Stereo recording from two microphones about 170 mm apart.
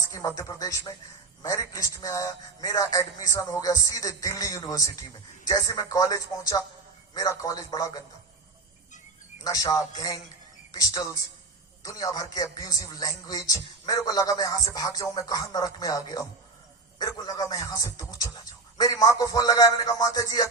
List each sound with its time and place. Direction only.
0.1 s speech: 20° left (ahead or behind)
9.4 s speech: 20° left (ahead or behind)